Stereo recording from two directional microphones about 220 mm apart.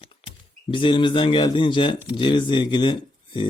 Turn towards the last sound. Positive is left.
turn(degrees=20)  # may be behind; listen again after turning